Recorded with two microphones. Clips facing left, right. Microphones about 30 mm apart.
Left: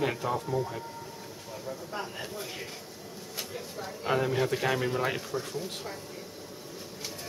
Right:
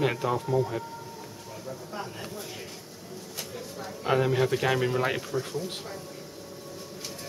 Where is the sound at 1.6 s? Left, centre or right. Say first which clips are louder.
Even; centre.